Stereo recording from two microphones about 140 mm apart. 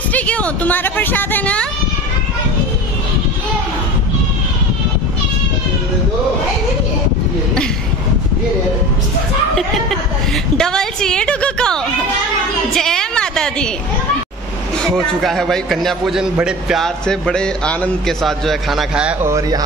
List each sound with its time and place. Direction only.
0.1 s speech: 10° left (ahead or behind)
10.6 s a man's voice: 5° left (ahead or behind)
12.7 s a sound: 5° left (ahead or behind)
14.8 s a man's voice: centre (ahead or behind)
19.2 s speech: 25° right (ahead or behind)